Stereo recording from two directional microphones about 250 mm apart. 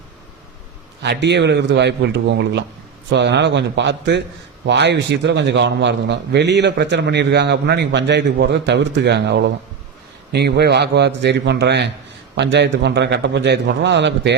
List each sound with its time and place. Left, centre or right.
1.0 s a man's voice: right